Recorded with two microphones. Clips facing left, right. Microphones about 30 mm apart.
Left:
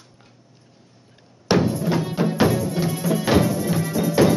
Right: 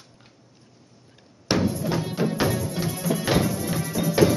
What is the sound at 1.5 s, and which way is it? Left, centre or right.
Music, centre.